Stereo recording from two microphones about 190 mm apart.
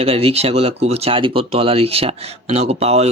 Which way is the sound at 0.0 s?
30° right (ahead or behind).